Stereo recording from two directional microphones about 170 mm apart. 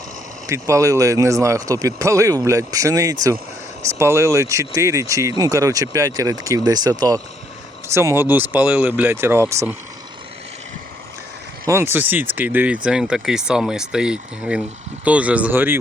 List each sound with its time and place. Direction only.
0.4 s speech: 20° right (ahead or behind)
11.7 s speech: 15° right (ahead or behind)